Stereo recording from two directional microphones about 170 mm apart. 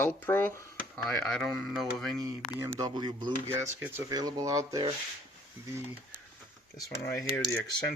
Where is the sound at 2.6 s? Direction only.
20° right (ahead or behind).